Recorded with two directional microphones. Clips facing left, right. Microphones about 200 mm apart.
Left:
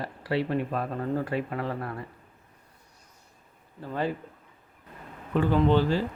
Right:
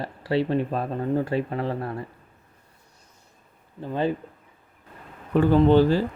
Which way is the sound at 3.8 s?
20° right (ahead or behind).